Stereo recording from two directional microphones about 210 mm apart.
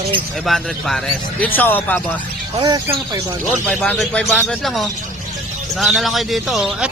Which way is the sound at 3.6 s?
5° left (ahead or behind).